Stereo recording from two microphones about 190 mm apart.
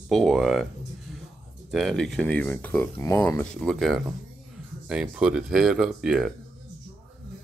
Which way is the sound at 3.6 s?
Centre (ahead or behind).